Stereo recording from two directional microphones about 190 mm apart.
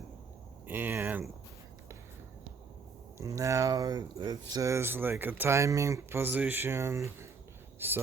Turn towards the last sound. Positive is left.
turn(degrees=-10)  # may be behind; listen again after turning